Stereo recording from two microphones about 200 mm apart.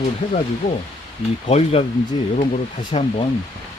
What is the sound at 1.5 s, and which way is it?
Speech, 30° left (ahead or behind).